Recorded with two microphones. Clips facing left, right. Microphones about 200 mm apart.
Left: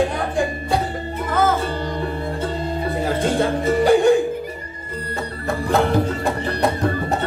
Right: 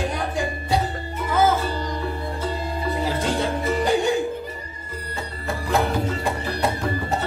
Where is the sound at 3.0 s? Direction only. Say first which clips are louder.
Left 5 dB; 55° left (ahead or behind).